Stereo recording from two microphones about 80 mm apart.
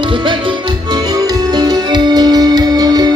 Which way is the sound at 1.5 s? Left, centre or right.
Right.